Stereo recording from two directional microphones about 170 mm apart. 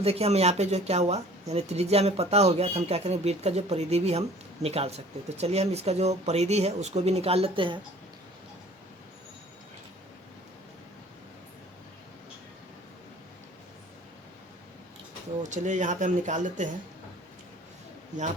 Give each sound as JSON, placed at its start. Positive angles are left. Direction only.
{"t": 0.0, "sound": "speech", "side_deg": -35}
{"t": 15.4, "sound": "speech", "side_deg": -45}